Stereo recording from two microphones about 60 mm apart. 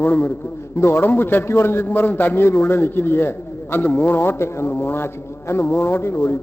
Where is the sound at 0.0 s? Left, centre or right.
Left.